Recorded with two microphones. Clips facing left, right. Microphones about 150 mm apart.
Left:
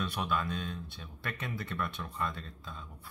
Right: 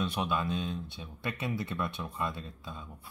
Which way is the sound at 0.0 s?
20° right (ahead or behind).